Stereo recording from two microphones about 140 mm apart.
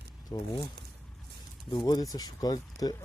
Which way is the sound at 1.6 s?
30° left (ahead or behind).